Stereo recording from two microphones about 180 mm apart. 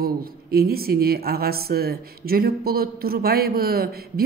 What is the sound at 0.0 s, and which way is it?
Speech, 60° right (ahead or behind).